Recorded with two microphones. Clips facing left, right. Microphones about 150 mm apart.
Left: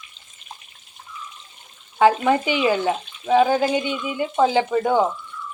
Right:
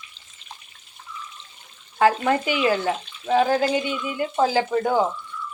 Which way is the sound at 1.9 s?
5° left (ahead or behind).